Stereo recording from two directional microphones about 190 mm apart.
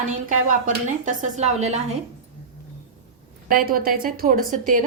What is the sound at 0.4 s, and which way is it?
Speech, 40° right (ahead or behind).